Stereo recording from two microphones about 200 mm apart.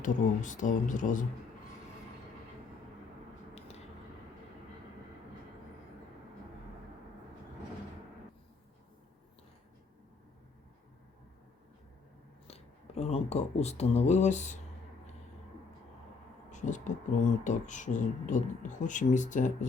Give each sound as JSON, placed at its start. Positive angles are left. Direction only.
{"t": 0.0, "sound": "speech", "side_deg": 40}
{"t": 12.5, "sound": "speech", "side_deg": 30}
{"t": 16.5, "sound": "speech", "side_deg": 35}